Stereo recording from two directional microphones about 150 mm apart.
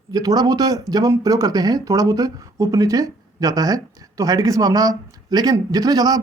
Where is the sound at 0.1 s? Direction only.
25° right (ahead or behind).